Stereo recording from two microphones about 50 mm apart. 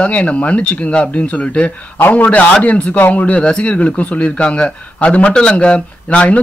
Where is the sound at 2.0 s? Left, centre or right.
Left.